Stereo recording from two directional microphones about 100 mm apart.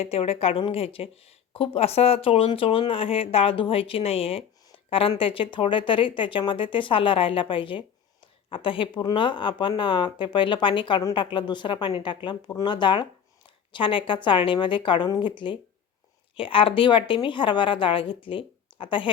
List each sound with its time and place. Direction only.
0.0 s speech: 75° left (ahead or behind); by 15.5 s 55° left (ahead or behind)
16.3 s speech: 65° left (ahead or behind)